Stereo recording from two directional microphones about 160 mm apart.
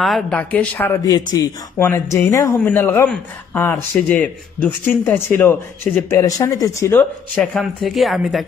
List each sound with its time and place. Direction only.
0.0 s speech: 5° left (ahead or behind)
1.0 s speech: 25° left (ahead or behind); by 8.5 s centre (ahead or behind)